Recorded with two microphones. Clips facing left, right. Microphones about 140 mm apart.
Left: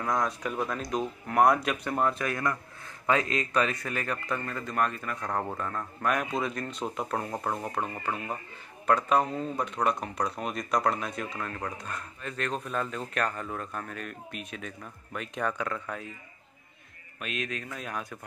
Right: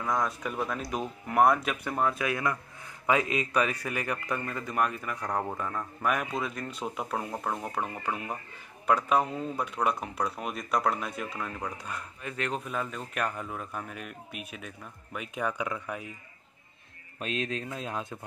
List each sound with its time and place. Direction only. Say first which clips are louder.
0.0 s speech: left 1 dB; 5° right (ahead or behind)
17.2 s speech: right 3 dB; 30° right (ahead or behind)